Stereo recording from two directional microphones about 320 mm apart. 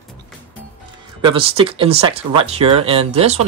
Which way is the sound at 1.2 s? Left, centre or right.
Centre.